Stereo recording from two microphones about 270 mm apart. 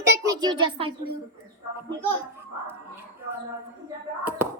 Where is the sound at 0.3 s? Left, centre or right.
Centre.